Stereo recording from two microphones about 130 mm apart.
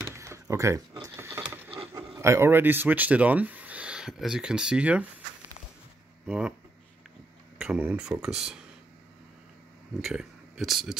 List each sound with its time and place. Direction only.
0.0 s a sound: 20° right (ahead or behind)
2.0 s speech: 20° right (ahead or behind)
6.2 s speech: 5° right (ahead or behind)
7.5 s speech: 5° right (ahead or behind)
10.0 s speech: 5° right (ahead or behind)